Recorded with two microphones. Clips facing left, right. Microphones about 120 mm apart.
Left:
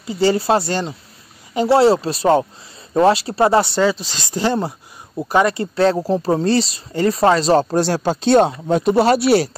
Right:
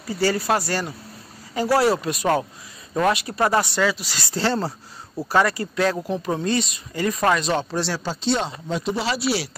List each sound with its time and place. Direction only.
0.0 s speech: 25° left (ahead or behind); by 9.5 s 55° left (ahead or behind)